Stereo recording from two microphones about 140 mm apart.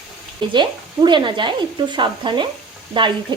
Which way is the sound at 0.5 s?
35° right (ahead or behind).